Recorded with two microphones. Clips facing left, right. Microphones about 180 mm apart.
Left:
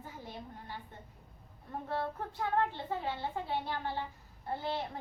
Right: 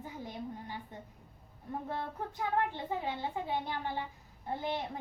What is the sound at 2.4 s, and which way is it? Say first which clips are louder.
A woman's voice: left 1 dB; 15° right (ahead or behind).